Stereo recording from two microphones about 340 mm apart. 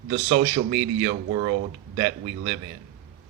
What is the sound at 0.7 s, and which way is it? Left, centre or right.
Speech, right.